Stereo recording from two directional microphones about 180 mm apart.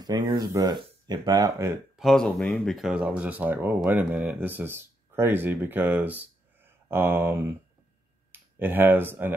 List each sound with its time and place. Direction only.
0.0 s speech: 20° right (ahead or behind)
2.0 s speech: centre (ahead or behind)